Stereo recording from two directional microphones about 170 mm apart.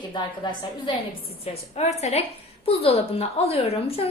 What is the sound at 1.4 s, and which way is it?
A woman's voice, 40° left (ahead or behind).